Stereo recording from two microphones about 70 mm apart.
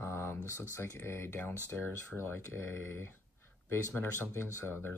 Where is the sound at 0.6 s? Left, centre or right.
Left.